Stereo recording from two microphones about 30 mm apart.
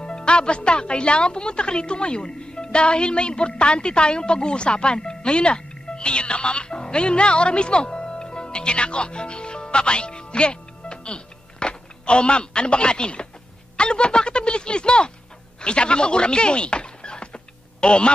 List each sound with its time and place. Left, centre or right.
0.0 s music: left
0.7 s speech: left
13.7 s a sound: left